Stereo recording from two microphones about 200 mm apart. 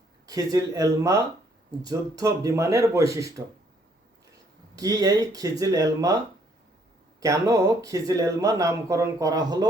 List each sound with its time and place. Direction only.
0.3 s speech: 15° right (ahead or behind)
4.7 s speech: 20° right (ahead or behind)
7.2 s speech: 15° right (ahead or behind)